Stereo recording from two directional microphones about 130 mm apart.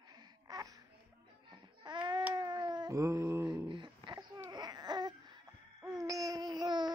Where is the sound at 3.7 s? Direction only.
35° right (ahead or behind).